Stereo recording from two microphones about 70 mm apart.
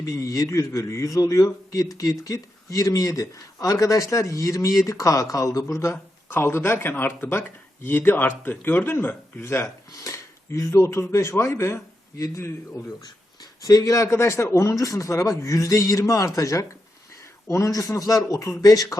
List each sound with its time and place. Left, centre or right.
0.0 s a man's voice: left
9.4 s a man's voice: left
9.9 s a man's voice: left
13.4 s a man's voice: left